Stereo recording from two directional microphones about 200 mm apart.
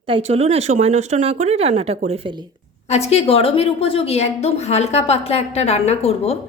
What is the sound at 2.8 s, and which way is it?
A woman's voice, 30° left (ahead or behind).